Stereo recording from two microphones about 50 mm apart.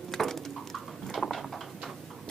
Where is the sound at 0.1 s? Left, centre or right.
Centre.